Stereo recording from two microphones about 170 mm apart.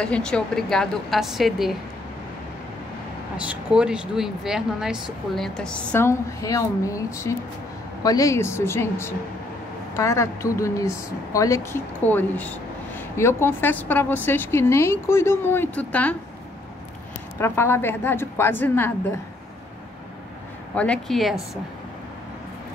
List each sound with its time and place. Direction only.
0.0 s speech: 5° left (ahead or behind)
3.3 s speech: 5° right (ahead or behind); by 16.2 s 10° left (ahead or behind)
17.4 s speech: 15° left (ahead or behind)
20.7 s speech: 5° left (ahead or behind)